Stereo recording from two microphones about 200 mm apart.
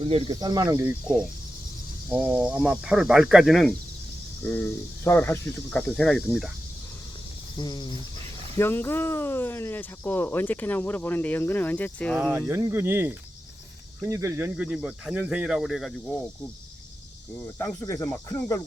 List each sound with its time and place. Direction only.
0.0 s speech: 25° right (ahead or behind); by 6.5 s centre (ahead or behind)
7.6 s speech: 20° left (ahead or behind); by 12.3 s 5° left (ahead or behind)
12.5 s speech: 15° right (ahead or behind)
17.4 s speech: 15° left (ahead or behind)